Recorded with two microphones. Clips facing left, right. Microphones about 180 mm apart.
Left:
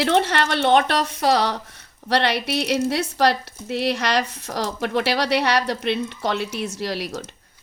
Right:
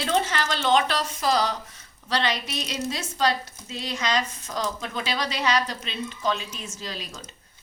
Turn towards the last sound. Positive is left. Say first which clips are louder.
# left 10 dB
turn(degrees=70)  # may be behind; listen again after turning